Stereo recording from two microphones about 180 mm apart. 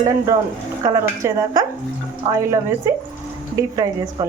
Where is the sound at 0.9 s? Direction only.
20° right (ahead or behind).